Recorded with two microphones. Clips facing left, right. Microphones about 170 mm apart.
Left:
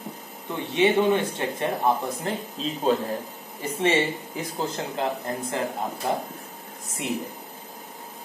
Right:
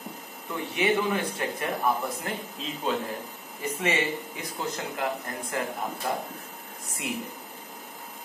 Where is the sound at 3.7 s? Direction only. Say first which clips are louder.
Left 5 dB; 30° left (ahead or behind).